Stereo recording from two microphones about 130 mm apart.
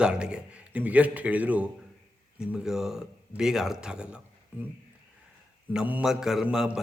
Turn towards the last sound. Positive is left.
turn(degrees=-5)  # may be behind; listen again after turning